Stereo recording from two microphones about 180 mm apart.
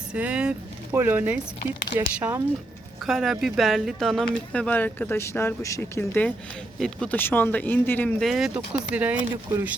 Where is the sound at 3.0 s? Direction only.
Centre (ahead or behind).